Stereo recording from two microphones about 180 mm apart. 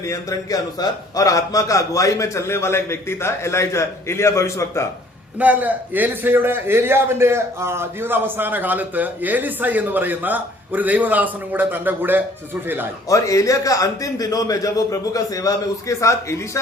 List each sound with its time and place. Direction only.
0.1 s a man's voice: 20° left (ahead or behind)
5.4 s a man's voice: 10° right (ahead or behind)
13.1 s a man's voice: 20° left (ahead or behind)